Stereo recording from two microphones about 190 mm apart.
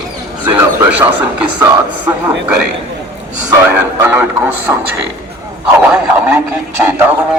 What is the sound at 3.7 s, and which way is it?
Speech, 10° right (ahead or behind).